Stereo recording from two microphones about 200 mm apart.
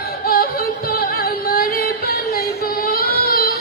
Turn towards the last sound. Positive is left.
turn(degrees=50)  # may be behind; listen again after turning